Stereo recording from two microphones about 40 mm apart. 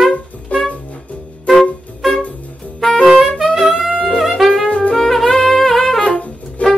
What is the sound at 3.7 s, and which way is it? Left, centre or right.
Music, right.